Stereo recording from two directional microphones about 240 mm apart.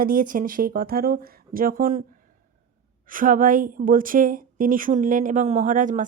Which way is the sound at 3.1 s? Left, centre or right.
Right.